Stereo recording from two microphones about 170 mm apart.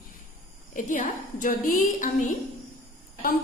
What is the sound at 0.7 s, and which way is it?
A woman's voice, 50° left (ahead or behind).